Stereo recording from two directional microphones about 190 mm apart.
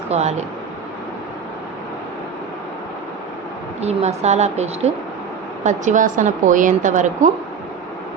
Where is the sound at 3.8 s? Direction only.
35° right (ahead or behind).